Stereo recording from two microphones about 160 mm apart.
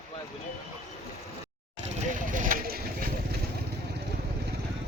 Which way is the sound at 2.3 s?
55° right (ahead or behind).